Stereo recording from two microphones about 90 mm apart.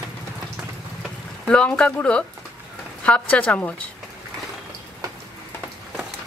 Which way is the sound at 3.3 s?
15° left (ahead or behind).